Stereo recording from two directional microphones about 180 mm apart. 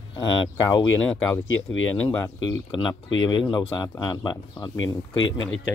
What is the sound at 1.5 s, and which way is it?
Speech, 90° left.